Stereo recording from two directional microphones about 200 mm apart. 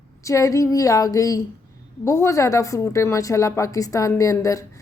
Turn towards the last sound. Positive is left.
turn(degrees=15)  # may be behind; listen again after turning